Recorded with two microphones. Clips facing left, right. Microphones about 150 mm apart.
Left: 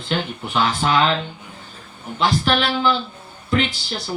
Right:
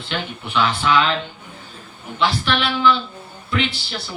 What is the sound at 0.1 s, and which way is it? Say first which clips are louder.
Speech: left 2 dB; 40° left (ahead or behind).